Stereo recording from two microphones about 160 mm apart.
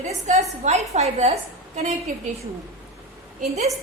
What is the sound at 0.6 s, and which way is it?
A woman's voice, 45° right (ahead or behind).